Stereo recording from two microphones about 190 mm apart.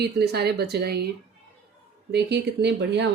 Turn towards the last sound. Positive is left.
turn(degrees=-65)  # may be behind; listen again after turning